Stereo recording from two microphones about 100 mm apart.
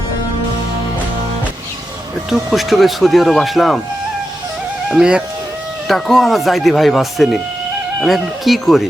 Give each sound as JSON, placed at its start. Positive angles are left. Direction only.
{"t": 2.3, "sound": "speech", "side_deg": 0}
{"t": 4.9, "sound": "speech", "side_deg": -10}